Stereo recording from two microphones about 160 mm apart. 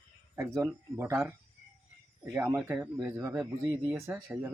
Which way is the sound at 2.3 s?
15° right (ahead or behind).